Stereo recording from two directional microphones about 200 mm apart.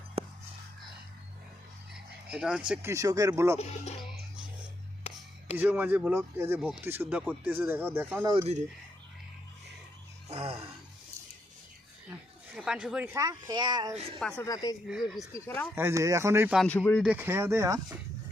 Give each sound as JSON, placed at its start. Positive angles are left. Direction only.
{"t": 0.2, "sound": "a sound", "side_deg": -30}
{"t": 1.9, "sound": "a sound", "side_deg": -5}
{"t": 2.9, "sound": "speech", "side_deg": -15}
{"t": 3.6, "sound": "speech", "side_deg": 35}
{"t": 5.5, "sound": "speech", "side_deg": -10}
{"t": 8.2, "sound": "speech", "side_deg": -20}
{"t": 10.2, "sound": "speech", "side_deg": -30}
{"t": 12.5, "sound": "speech", "side_deg": -5}
{"t": 13.1, "sound": "speech", "side_deg": -20}
{"t": 14.2, "sound": "speech", "side_deg": 5}
{"t": 14.4, "sound": "speech", "side_deg": 20}
{"t": 15.7, "sound": "speech", "side_deg": -15}
{"t": 16.6, "sound": "speech", "side_deg": 5}
{"t": 17.0, "sound": "speech", "side_deg": -10}